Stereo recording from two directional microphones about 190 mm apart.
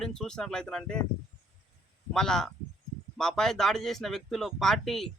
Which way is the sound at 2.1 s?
5° left (ahead or behind).